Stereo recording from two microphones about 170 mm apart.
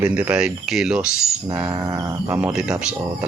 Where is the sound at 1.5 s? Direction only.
15° right (ahead or behind).